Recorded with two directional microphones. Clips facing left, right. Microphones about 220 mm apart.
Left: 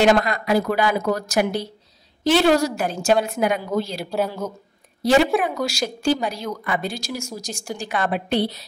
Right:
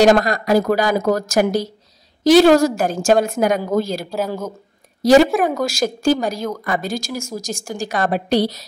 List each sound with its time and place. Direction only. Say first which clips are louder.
0.0 s a woman's voice: right 4 dB; 40° right (ahead or behind)